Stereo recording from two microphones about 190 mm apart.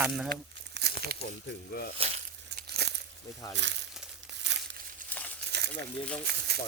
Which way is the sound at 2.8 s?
60° right (ahead or behind).